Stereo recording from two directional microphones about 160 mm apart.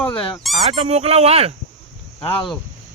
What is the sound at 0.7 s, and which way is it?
Speech, 40° right (ahead or behind).